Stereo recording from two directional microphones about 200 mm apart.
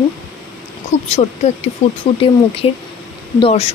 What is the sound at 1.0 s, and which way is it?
A woman's voice, 35° left (ahead or behind).